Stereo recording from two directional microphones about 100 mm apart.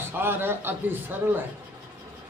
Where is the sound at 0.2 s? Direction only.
20° right (ahead or behind).